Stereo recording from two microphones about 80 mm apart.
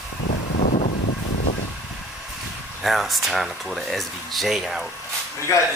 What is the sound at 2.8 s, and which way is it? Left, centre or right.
Speech, centre.